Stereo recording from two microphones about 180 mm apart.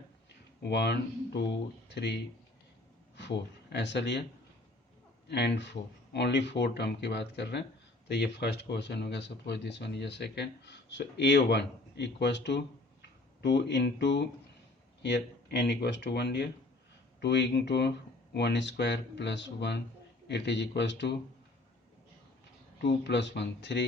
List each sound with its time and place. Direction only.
0.6 s speech: 70° left (ahead or behind)
3.2 s speech: 70° left (ahead or behind)
5.3 s speech: 70° left (ahead or behind)
22.8 s speech: 70° left (ahead or behind)